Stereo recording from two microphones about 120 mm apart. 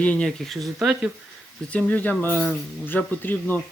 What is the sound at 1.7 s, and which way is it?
Speech, 10° left (ahead or behind).